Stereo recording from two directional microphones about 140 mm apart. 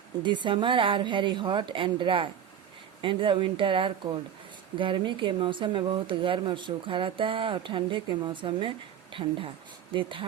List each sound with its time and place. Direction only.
0.2 s speech: 35° right (ahead or behind)
9.9 s speech: 35° right (ahead or behind)